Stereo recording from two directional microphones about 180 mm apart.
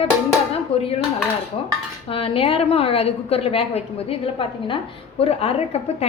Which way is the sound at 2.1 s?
30° left (ahead or behind).